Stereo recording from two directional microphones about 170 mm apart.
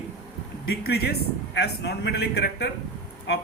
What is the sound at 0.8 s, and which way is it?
Speech, 70° left (ahead or behind).